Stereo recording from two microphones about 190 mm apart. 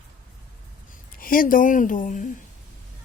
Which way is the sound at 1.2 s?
50° left (ahead or behind).